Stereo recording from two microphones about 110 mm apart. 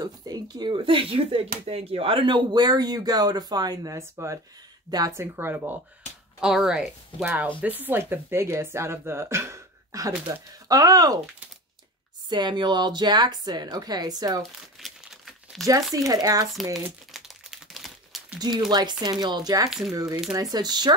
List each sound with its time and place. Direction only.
0.0 s a woman's voice: 40° right (ahead or behind); by 5.8 s 20° right (ahead or behind)
6.4 s a woman's voice: 5° right (ahead or behind); by 11.1 s 35° right (ahead or behind)
12.3 s speech: 40° right (ahead or behind)
14.4 s crumpling: centre (ahead or behind)
15.6 s speech: 30° right (ahead or behind)
17.1 s crumpling: 5° right (ahead or behind)
18.7 s speech: 40° right (ahead or behind)